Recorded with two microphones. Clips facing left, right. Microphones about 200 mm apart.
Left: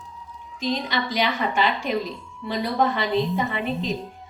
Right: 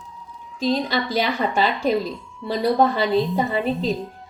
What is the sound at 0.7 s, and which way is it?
A woman's voice, 35° right (ahead or behind).